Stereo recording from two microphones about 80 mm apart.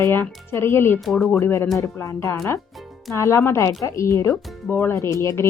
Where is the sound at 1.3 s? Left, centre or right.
Left.